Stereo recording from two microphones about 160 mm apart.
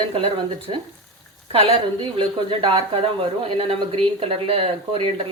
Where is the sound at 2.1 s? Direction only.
30° right (ahead or behind).